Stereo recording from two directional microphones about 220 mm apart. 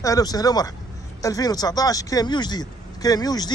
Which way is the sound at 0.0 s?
15° left (ahead or behind).